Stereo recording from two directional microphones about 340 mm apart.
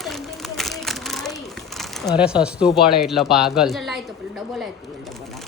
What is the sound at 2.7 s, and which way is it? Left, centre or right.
Speech, left.